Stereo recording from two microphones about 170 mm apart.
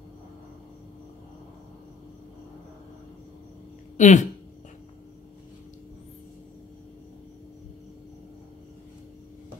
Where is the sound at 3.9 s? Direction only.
45° left (ahead or behind).